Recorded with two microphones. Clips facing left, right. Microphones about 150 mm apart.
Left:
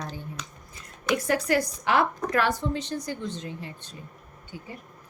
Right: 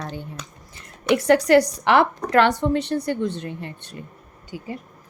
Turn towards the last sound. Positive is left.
turn(degrees=-75)  # may be behind; listen again after turning